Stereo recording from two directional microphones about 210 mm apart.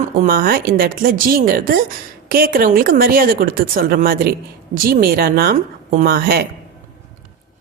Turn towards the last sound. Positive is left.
turn(degrees=-45)  # may be behind; listen again after turning